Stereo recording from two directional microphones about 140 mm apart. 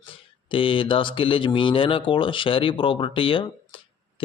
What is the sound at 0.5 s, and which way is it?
A man's voice, 40° left (ahead or behind).